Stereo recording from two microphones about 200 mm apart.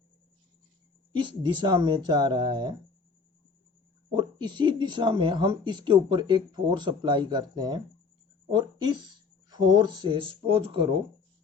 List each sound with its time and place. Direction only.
1.2 s speech: 25° right (ahead or behind)
4.1 s speech: 25° right (ahead or behind)